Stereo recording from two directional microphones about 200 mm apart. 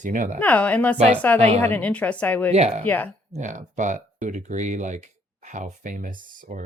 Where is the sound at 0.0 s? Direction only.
40° right (ahead or behind).